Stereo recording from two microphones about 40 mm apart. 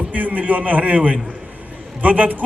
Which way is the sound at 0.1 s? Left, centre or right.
Right.